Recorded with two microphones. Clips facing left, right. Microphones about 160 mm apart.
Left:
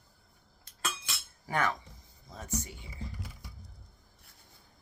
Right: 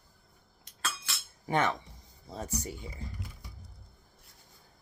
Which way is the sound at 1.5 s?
25° right (ahead or behind).